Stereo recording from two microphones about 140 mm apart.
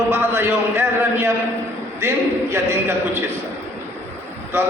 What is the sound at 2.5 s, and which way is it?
Speech, 15° right (ahead or behind).